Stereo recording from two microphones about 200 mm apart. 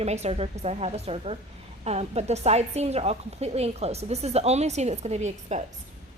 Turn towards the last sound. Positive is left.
turn(degrees=-35)  # may be behind; listen again after turning